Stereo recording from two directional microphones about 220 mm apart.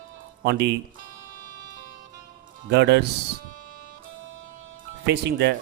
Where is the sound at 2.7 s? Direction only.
50° right (ahead or behind).